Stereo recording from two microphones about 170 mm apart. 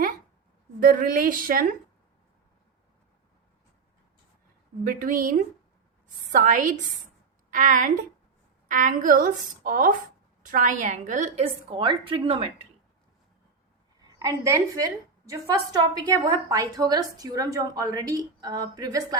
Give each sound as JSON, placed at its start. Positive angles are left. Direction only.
{"t": 0.8, "sound": "a woman's voice", "side_deg": -55}
{"t": 4.8, "sound": "a woman's voice", "side_deg": -55}
{"t": 11.4, "sound": "a woman's voice", "side_deg": -30}
{"t": 14.1, "sound": "a woman's voice", "side_deg": -20}